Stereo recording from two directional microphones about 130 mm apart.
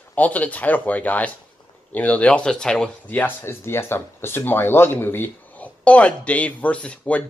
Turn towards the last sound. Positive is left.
turn(degrees=10)  # may be behind; listen again after turning